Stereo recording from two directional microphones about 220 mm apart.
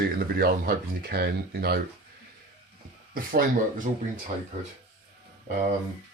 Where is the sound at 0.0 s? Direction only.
45° right (ahead or behind).